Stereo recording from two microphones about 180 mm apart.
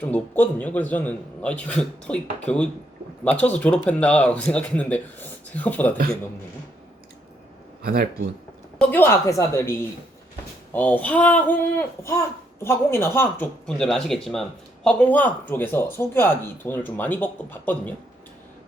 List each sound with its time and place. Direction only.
0.0 s speech: 10° left (ahead or behind)
7.8 s speech: 55° right (ahead or behind)
8.8 s speech: 10° left (ahead or behind)
10.7 s speech: 10° left (ahead or behind)